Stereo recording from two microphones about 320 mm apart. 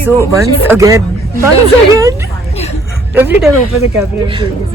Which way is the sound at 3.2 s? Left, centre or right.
Centre.